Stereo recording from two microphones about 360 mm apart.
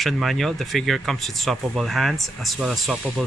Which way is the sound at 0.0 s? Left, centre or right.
Centre.